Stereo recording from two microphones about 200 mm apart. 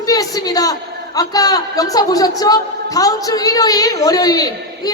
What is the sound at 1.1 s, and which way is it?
A woman's voice, 20° left (ahead or behind).